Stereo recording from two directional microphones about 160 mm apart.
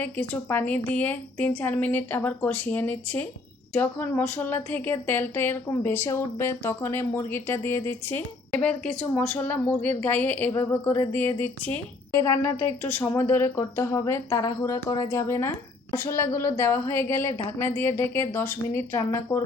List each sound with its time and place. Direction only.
0.0 s speech: 10° left (ahead or behind)